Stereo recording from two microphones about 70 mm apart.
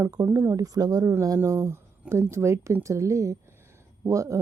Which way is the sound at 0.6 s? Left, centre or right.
Right.